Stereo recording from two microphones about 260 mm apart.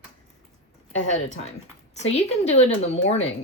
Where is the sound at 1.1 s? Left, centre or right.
Left.